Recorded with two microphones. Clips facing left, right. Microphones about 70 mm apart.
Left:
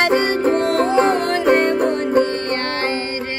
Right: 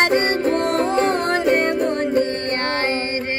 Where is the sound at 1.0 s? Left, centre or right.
Left.